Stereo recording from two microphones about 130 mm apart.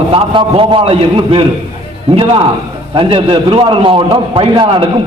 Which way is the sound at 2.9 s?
40° right (ahead or behind).